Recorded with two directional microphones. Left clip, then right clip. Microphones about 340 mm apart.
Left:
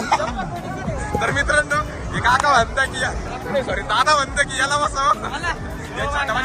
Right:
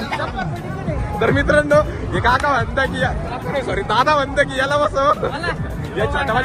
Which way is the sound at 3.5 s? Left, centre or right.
Centre.